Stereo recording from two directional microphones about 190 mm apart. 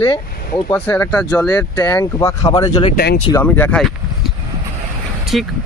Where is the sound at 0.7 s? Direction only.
10° left (ahead or behind).